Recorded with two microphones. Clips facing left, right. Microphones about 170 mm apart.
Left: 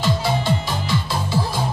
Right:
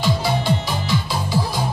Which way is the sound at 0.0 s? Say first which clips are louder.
Even; centre (ahead or behind).